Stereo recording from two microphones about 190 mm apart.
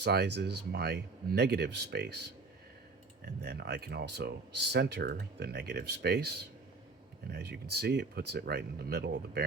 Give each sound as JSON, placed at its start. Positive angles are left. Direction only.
{"t": 0.0, "sound": "speech", "side_deg": -60}
{"t": 3.4, "sound": "speech", "side_deg": -60}